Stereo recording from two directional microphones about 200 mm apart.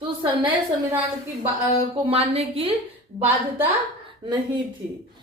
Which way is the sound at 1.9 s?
30° right (ahead or behind).